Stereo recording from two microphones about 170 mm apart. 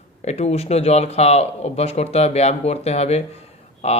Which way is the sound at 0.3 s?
40° left (ahead or behind).